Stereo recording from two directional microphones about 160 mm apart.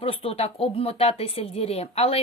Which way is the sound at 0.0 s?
35° left (ahead or behind).